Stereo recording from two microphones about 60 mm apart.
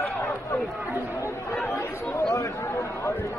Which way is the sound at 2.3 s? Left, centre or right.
Left.